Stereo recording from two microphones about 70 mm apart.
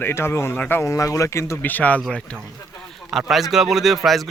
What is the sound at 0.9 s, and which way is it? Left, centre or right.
Speech, left.